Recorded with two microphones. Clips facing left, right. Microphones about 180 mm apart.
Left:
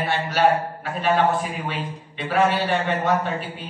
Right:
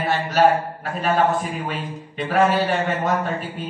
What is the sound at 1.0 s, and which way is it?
A man's voice, 40° right (ahead or behind).